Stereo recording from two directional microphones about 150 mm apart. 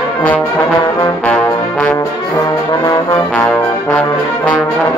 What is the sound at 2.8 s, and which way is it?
Trombone, 25° left (ahead or behind).